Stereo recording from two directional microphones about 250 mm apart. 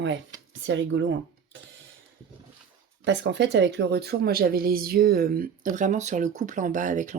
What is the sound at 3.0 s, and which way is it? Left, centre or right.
Speech, right.